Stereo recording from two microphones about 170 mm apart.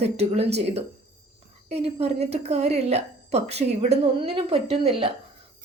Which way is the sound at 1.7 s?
35° right (ahead or behind).